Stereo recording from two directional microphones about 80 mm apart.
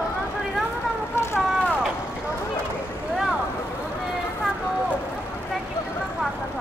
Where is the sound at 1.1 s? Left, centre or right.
Left.